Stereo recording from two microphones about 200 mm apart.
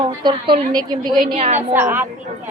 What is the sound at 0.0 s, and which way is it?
A woman's voice, 25° right (ahead or behind).